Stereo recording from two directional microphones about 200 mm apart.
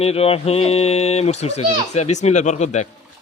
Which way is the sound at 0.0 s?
30° left (ahead or behind).